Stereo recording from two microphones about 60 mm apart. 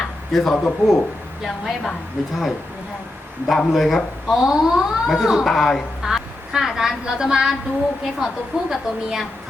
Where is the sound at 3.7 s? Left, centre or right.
Centre.